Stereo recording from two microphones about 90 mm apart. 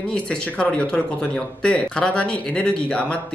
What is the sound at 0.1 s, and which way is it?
Speech, 10° left (ahead or behind).